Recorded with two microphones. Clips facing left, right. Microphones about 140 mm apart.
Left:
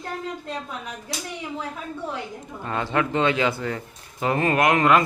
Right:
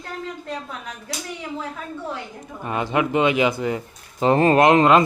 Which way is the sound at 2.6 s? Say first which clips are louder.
Right 2 dB; 15° right (ahead or behind).